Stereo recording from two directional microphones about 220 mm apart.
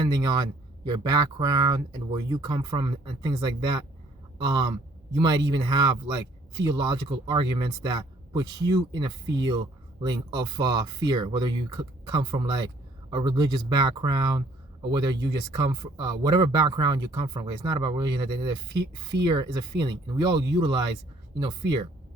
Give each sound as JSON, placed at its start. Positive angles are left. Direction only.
{"t": 0.1, "sound": "a man's voice", "side_deg": -20}